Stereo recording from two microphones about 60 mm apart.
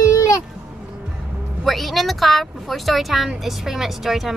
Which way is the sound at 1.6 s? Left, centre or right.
Centre.